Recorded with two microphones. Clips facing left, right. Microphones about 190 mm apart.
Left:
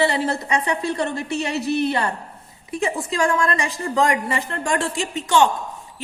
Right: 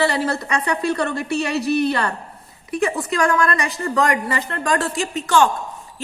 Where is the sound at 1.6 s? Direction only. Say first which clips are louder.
Right 2 dB; 15° right (ahead or behind).